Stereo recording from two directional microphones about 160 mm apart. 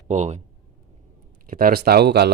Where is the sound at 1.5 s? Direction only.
70° right (ahead or behind); by 2.3 s 90° right.